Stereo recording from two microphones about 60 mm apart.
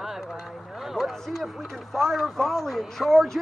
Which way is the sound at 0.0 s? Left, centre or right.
Centre.